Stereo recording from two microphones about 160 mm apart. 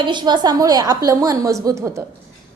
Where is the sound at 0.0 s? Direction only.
30° right (ahead or behind).